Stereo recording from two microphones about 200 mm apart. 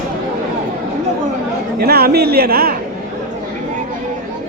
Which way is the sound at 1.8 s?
50° right (ahead or behind).